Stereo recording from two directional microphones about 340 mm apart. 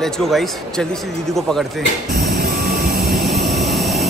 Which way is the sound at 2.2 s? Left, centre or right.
Right.